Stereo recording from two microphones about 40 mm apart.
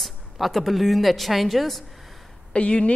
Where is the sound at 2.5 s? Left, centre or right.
Left.